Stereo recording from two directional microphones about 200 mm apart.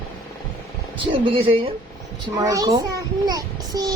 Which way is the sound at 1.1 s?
25° right (ahead or behind).